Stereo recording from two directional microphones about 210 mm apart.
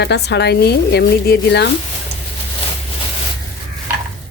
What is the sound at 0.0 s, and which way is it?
Speech, 55° left (ahead or behind).